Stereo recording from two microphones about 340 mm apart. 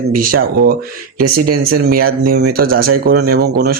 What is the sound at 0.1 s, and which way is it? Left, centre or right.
Speech, right.